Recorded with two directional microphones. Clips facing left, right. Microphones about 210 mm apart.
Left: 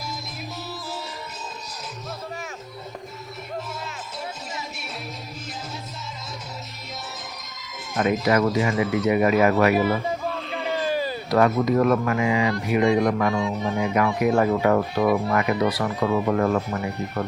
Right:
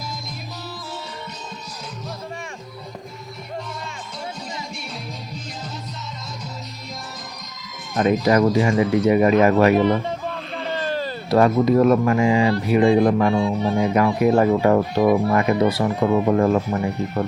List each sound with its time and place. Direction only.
8.0 s speech: 30° right (ahead or behind)
9.7 s a sound: 5° left (ahead or behind)
11.3 s speech: 30° right (ahead or behind)